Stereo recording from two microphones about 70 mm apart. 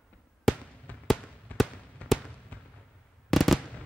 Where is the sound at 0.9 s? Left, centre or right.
Left.